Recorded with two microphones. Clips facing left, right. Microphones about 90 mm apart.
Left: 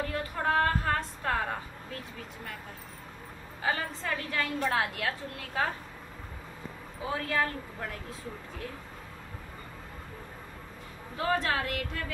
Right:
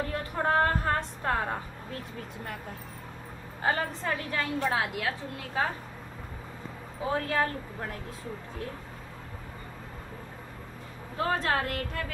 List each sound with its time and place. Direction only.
0.0 s a sound: 20° right (ahead or behind)
3.6 s a woman's voice: 20° right (ahead or behind)
7.1 s speech: 35° right (ahead or behind)
11.1 s speech: 40° right (ahead or behind)